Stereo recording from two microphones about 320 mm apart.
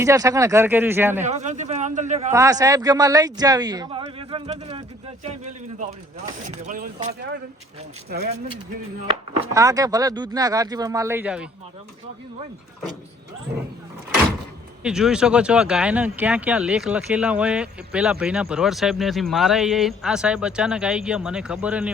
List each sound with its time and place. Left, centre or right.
0.0 s speech: centre
1.2 s a man's voice: right
2.3 s speech: centre
6.4 s a man's voice: right
9.0 s speech: centre
14.8 s speech: centre